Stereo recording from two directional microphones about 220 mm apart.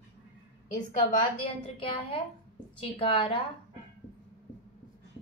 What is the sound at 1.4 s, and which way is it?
A woman's voice, 25° left (ahead or behind).